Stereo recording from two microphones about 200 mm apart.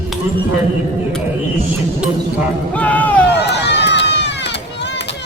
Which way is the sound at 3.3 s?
55° left (ahead or behind).